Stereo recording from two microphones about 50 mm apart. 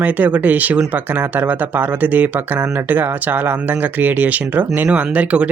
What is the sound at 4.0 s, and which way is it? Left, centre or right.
Speech, right.